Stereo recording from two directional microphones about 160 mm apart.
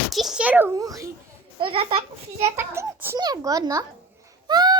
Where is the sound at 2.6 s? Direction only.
15° right (ahead or behind).